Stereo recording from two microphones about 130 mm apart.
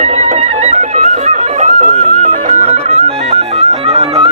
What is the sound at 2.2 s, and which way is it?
Music, 90° right.